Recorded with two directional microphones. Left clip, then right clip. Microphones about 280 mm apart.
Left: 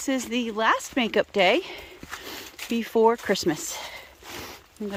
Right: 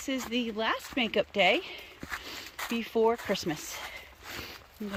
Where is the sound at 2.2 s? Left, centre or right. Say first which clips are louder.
Left 2 dB; centre.